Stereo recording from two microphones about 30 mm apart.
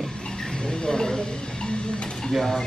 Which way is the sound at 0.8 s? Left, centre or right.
Left.